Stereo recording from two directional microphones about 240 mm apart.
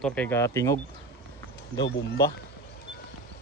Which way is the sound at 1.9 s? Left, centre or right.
Left.